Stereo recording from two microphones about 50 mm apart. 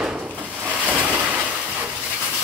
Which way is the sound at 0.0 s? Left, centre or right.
Centre.